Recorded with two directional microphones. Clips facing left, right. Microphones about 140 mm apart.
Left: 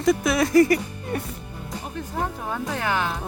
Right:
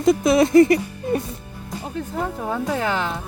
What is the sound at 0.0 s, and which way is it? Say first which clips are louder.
Speech: right 5 dB; 25° right (ahead or behind).